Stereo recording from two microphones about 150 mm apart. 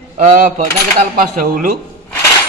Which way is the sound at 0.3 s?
65° right (ahead or behind).